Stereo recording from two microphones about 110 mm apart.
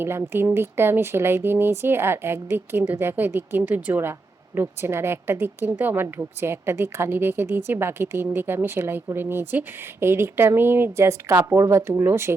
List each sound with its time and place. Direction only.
0.0 s a woman's voice: 20° right (ahead or behind)